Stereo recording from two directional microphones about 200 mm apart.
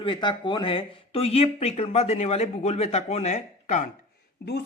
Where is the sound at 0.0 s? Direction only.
25° left (ahead or behind).